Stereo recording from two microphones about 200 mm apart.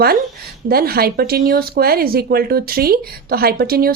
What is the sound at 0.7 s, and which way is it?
A woman's voice, 50° right (ahead or behind).